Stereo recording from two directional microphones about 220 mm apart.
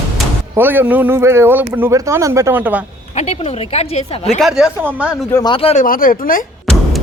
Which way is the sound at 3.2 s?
30° left (ahead or behind).